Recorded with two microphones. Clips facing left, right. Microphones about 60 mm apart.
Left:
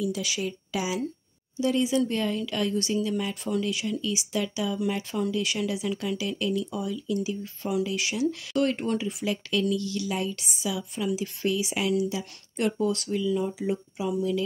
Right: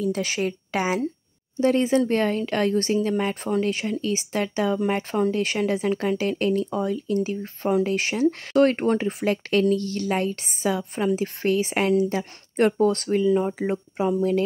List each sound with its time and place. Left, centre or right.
0.0 s speech: right